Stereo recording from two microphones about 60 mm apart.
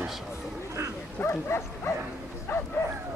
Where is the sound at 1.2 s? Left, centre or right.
Left.